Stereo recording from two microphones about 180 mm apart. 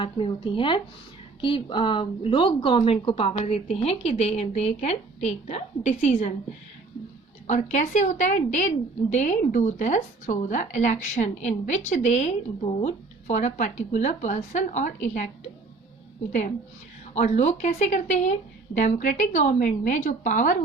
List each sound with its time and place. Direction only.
0.0 s speech: 30° left (ahead or behind)
7.4 s speech: 40° left (ahead or behind)
17.2 s speech: 40° left (ahead or behind)